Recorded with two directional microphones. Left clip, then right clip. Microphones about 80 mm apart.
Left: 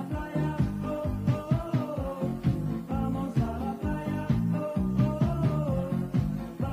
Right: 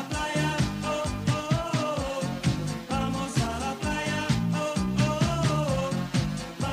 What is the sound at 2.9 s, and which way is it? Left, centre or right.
Music, centre.